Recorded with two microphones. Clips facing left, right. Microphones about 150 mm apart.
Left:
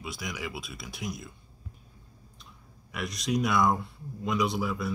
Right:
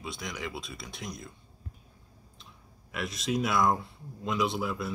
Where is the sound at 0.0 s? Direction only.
5° left (ahead or behind).